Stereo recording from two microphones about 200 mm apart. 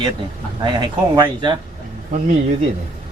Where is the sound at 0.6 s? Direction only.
25° right (ahead or behind).